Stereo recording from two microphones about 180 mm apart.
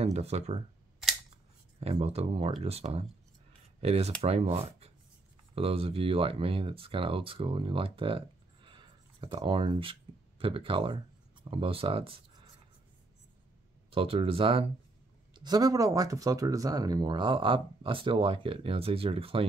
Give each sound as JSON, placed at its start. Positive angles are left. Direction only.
{"t": 0.0, "sound": "speech", "side_deg": -35}
{"t": 1.8, "sound": "speech", "side_deg": -35}
{"t": 8.6, "sound": "a sound", "side_deg": -25}
{"t": 10.4, "sound": "speech", "side_deg": -30}
{"t": 13.8, "sound": "speech", "side_deg": -30}